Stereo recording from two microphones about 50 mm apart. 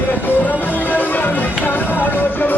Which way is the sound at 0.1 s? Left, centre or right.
Left.